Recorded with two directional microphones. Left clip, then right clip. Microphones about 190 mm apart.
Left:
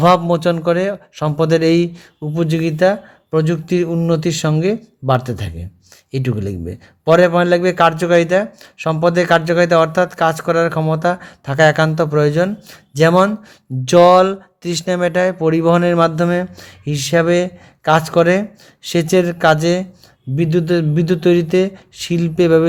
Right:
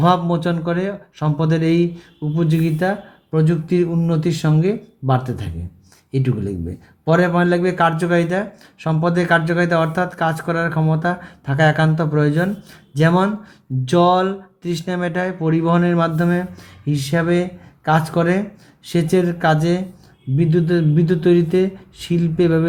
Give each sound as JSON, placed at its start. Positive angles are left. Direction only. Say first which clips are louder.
{"t": 0.0, "sound": "a man's voice", "louder": "left 5 dB", "side_deg": 55}